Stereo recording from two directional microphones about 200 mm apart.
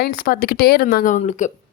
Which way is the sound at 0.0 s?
50° left (ahead or behind).